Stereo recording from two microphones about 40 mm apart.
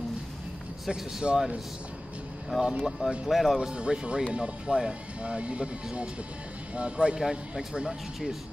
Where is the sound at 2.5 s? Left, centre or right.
Centre.